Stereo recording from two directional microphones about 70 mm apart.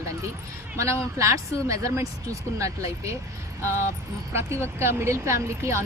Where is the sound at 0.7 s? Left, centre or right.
Right.